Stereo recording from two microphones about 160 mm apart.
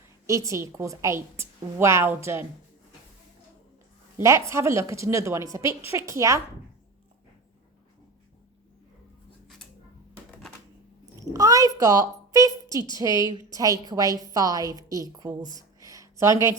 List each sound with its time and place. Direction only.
0.3 s a woman's voice: 20° right (ahead or behind)
4.2 s a woman's voice: 15° right (ahead or behind)
11.2 s a child's voice: 20° right (ahead or behind)
13.1 s a woman's voice: 25° left (ahead or behind)
13.5 s a woman's voice: 20° right (ahead or behind)
15.4 s a woman's voice: 25° left (ahead or behind)
15.8 s a sound: 20° right (ahead or behind)